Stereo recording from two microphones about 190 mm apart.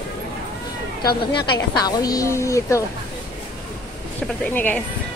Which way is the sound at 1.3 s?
20° left (ahead or behind).